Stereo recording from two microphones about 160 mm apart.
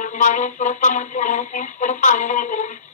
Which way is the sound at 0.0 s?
55° left (ahead or behind).